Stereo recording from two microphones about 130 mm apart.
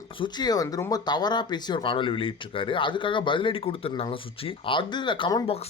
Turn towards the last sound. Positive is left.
turn(degrees=35)  # may be behind; listen again after turning